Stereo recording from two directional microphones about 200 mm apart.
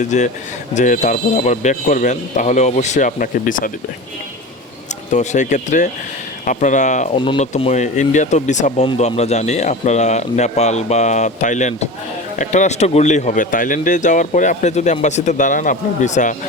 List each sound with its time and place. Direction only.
0.0 s speech: 35° left (ahead or behind)
5.1 s speech: 35° left (ahead or behind)